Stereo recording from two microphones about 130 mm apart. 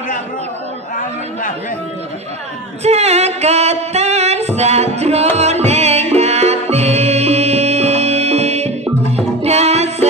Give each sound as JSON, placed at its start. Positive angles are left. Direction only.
{"t": 2.8, "sound": "music", "side_deg": -55}